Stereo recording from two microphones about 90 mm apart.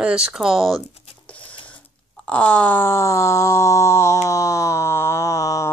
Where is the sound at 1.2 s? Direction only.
15° left (ahead or behind).